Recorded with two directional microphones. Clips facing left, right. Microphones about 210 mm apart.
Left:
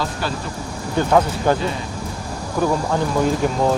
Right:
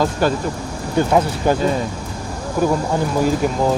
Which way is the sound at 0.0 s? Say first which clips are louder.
Right 7 dB; 45° right (ahead or behind).